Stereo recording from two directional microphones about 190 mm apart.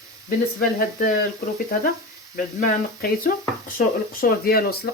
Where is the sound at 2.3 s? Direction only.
45° left (ahead or behind).